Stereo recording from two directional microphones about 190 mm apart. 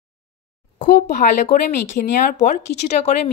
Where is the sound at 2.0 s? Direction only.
50° left (ahead or behind).